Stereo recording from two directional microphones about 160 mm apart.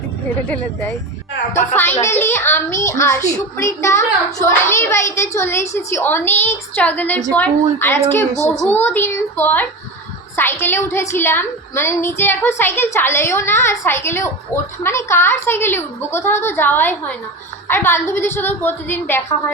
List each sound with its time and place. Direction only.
0.4 s a woman's voice: 10° left (ahead or behind)